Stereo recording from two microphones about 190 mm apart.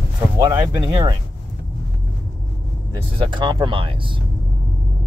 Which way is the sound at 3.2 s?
25° right (ahead or behind).